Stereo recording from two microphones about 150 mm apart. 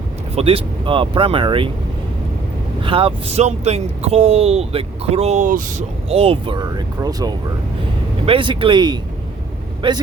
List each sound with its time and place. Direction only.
0.3 s speech: 40° right (ahead or behind)
2.8 s speech: 35° right (ahead or behind); by 5.8 s 60° right (ahead or behind)
6.1 s speech: 40° right (ahead or behind); by 7.3 s 25° right (ahead or behind)
8.2 s speech: 35° right (ahead or behind)